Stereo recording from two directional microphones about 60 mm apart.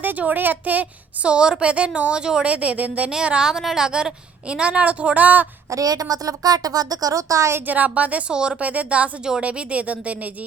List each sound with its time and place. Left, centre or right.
0.0 s a woman's voice: right
3.1 s a woman's voice: centre
5.7 s a woman's voice: right
7.7 s a woman's voice: right
8.3 s speech: centre
8.6 s a woman's voice: right